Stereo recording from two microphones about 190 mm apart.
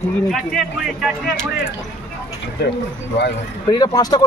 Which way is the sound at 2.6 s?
60° left (ahead or behind).